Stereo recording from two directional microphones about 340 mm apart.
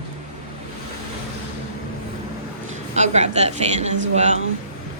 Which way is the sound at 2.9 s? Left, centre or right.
Centre.